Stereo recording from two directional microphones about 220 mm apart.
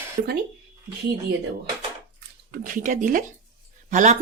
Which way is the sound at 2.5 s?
35° right (ahead or behind).